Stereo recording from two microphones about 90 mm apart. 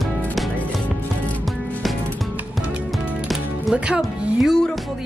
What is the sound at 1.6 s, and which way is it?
Music, 15° left (ahead or behind).